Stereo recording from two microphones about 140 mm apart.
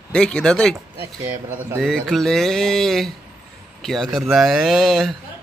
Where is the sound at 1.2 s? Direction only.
15° right (ahead or behind).